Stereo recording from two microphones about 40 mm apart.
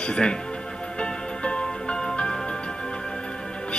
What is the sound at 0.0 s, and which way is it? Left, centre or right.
Speech, left.